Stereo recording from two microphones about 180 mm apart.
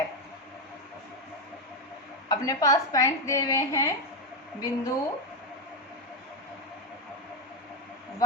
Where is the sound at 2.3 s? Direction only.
20° left (ahead or behind).